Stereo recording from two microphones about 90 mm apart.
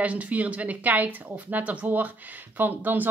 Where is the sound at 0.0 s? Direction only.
15° right (ahead or behind).